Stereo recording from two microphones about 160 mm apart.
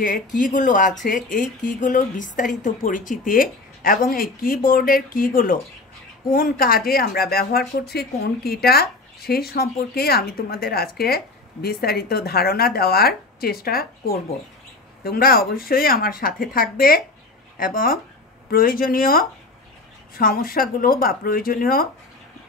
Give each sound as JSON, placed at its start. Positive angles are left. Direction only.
{"t": 0.0, "sound": "speech", "side_deg": 55}